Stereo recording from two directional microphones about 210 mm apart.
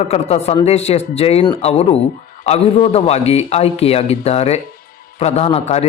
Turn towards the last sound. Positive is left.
turn(degrees=30)  # may be behind; listen again after turning